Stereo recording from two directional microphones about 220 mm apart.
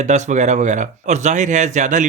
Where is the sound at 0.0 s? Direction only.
35° right (ahead or behind).